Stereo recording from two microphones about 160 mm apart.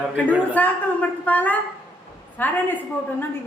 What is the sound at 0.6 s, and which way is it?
A woman's voice, 10° left (ahead or behind).